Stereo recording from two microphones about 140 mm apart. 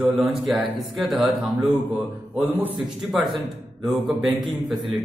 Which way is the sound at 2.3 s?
10° right (ahead or behind).